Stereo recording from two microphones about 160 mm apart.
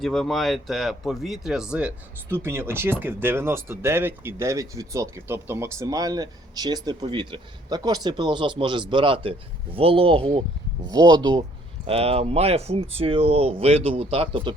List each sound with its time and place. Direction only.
0.0 s speech: centre (ahead or behind); by 11.4 s 25° right (ahead or behind)
11.9 s speech: 40° right (ahead or behind)